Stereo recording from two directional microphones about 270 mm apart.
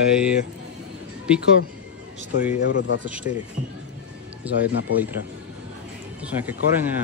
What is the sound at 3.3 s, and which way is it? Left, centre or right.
Speech, left.